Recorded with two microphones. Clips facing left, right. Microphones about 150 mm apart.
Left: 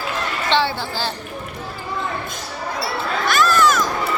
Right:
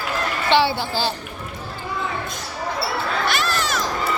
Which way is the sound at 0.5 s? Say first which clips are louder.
Right 2 dB; 10° right (ahead or behind).